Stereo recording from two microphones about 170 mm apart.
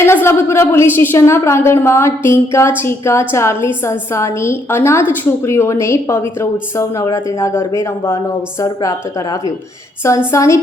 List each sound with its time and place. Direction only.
0.0 s a woman's voice: 15° left (ahead or behind)
10.3 s a woman's voice: 15° left (ahead or behind)